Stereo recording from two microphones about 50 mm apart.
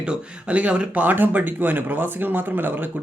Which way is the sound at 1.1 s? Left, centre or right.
Right.